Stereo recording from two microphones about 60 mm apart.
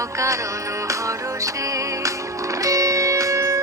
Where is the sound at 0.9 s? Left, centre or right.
Right.